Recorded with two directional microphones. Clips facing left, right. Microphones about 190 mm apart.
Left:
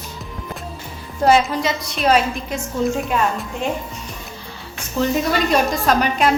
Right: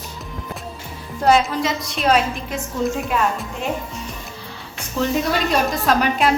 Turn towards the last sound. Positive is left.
turn(degrees=0)  # may be behind; listen again after turning